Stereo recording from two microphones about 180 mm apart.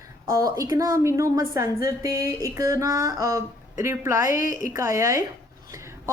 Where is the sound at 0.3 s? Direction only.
15° right (ahead or behind).